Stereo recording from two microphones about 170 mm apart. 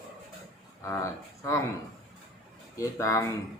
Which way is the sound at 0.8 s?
20° left (ahead or behind).